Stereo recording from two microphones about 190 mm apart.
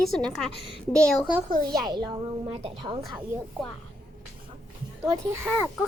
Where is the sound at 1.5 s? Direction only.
50° right (ahead or behind).